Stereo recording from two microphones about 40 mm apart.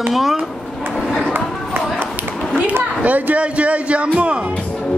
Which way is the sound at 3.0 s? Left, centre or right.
Right.